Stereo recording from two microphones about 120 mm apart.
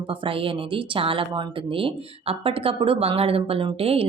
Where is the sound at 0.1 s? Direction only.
45° right (ahead or behind).